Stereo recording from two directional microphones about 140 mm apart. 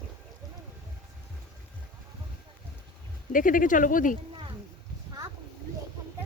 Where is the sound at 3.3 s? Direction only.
75° left (ahead or behind).